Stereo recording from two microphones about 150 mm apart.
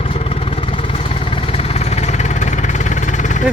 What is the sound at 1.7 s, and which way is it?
Vehicle, 45° left (ahead or behind).